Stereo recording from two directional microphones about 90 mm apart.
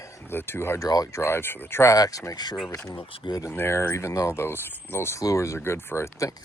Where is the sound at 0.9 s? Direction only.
40° left (ahead or behind).